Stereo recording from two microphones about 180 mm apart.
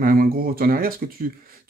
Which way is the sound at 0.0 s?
55° right (ahead or behind).